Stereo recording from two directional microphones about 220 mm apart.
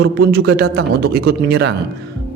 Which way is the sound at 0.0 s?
45° right (ahead or behind).